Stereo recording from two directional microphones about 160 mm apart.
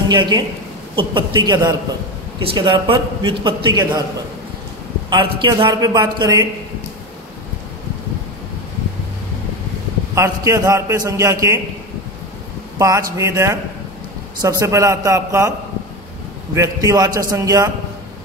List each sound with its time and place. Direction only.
0.1 s a man's voice: 30° right (ahead or behind)
5.1 s a man's voice: 30° right (ahead or behind)
10.1 s a man's voice: 20° right (ahead or behind)
12.7 s a man's voice: 20° right (ahead or behind)
16.5 s a man's voice: 20° right (ahead or behind)